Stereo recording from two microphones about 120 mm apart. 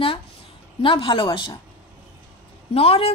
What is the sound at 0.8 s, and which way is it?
Speech, 45° left (ahead or behind).